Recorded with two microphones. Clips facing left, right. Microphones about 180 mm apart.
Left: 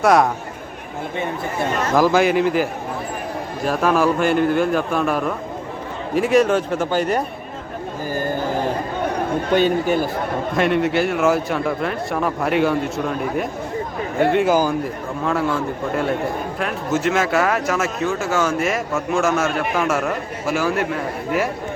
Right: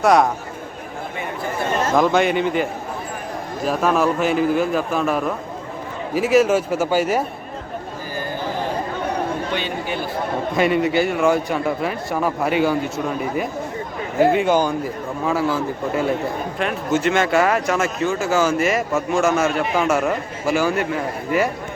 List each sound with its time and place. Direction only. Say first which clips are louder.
0.0 s speech: even; centre (ahead or behind)
2.0 s speech: left 2 dB; centre (ahead or behind)
9.5 s speech: left 8 dB; 45° left (ahead or behind)
10.5 s speech: even; centre (ahead or behind)